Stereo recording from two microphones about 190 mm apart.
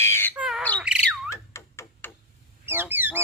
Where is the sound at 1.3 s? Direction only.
15° left (ahead or behind).